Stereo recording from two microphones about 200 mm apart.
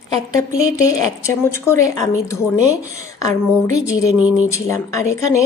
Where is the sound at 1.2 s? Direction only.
15° left (ahead or behind).